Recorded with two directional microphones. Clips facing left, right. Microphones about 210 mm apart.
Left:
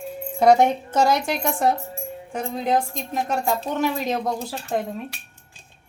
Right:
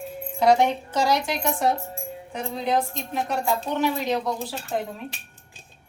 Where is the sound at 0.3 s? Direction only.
50° left (ahead or behind).